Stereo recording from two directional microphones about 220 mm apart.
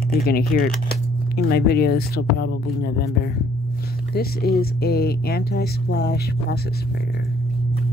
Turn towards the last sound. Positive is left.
turn(degrees=50)  # may be behind; listen again after turning